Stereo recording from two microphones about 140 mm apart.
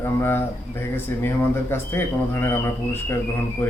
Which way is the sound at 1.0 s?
15° left (ahead or behind).